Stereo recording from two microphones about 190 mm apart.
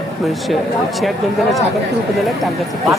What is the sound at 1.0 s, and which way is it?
Speech, centre (ahead or behind).